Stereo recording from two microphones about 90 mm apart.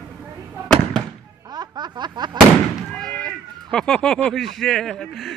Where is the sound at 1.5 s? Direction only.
50° right (ahead or behind).